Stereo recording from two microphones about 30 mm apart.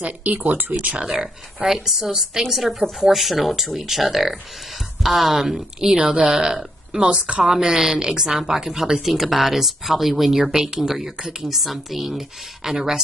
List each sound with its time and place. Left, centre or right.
0.0 s speech: right
1.0 s speech: centre
2.4 s a woman's voice: centre
5.9 s speech: right
6.3 s speech: right
7.4 s speech: right
9.1 s speech: centre